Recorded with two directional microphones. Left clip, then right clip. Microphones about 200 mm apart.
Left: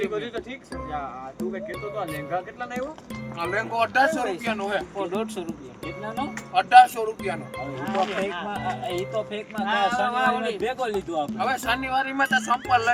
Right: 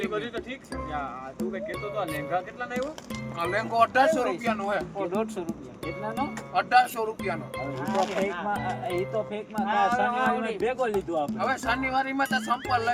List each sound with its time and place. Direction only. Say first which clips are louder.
0.0 s speech: left 2 dB; centre (ahead or behind)
2.0 s speech: even; centre (ahead or behind)
3.3 s speech: right 1 dB; 10° right (ahead or behind)
7.9 s speech: left 2 dB; 35° right (ahead or behind)
8.5 s speech: left 1 dB; centre (ahead or behind)
10.7 s speech: even; 5° left (ahead or behind)